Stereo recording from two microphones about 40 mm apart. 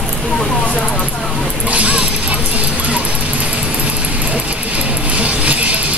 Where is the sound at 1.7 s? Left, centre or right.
Right.